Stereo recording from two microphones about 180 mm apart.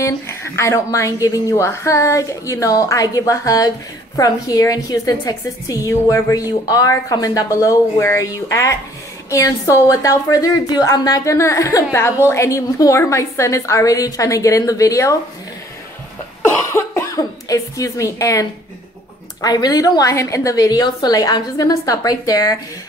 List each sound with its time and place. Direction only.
0.0 s a woman's voice: 15° left (ahead or behind)
16.4 s a woman's voice: 15° left (ahead or behind)